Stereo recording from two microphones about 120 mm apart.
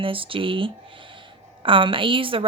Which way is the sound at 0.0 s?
45° right (ahead or behind).